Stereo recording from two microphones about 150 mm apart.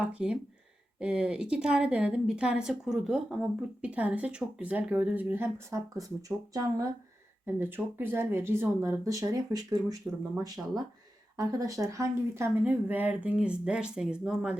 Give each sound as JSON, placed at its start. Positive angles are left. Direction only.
{"t": 0.0, "sound": "speech", "side_deg": -5}